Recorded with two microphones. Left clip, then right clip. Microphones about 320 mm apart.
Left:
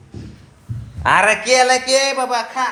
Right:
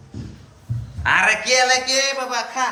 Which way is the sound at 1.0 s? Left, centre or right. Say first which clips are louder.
Left 3 dB; centre.